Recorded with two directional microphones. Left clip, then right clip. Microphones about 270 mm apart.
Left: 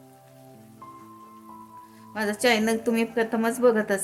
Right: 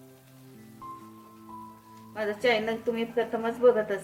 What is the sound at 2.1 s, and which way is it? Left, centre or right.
A woman's voice, left.